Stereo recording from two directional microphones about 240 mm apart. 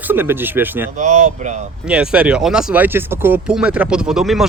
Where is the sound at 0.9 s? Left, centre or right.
Right.